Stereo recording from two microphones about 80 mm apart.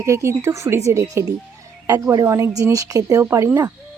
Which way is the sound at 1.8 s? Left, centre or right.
Right.